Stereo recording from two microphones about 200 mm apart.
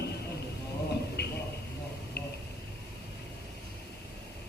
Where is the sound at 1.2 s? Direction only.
55° left (ahead or behind).